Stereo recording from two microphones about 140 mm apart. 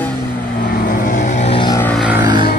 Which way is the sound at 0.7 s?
70° left (ahead or behind).